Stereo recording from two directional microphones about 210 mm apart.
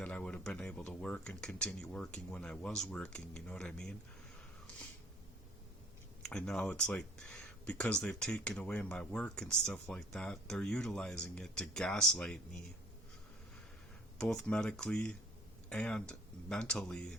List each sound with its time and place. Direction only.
0.0 s speech: 5° left (ahead or behind)
6.2 s speech: 5° left (ahead or behind)
14.2 s speech: 5° left (ahead or behind)